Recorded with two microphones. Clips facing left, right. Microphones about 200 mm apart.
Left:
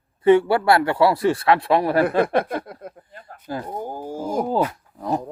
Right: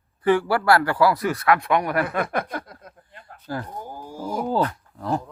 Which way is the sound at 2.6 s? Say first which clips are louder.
Left 5 dB; 55° left (ahead or behind).